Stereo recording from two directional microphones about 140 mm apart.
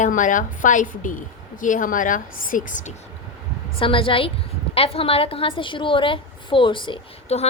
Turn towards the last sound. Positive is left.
turn(degrees=45)  # may be behind; listen again after turning